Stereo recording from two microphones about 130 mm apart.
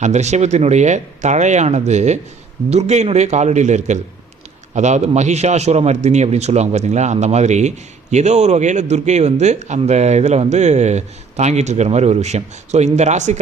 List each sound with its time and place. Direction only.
0.0 s a man's voice: 60° right (ahead or behind)